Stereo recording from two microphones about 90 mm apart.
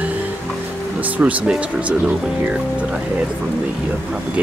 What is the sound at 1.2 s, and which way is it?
Speech, 15° right (ahead or behind).